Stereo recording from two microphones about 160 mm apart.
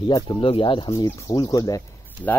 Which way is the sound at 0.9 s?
20° left (ahead or behind).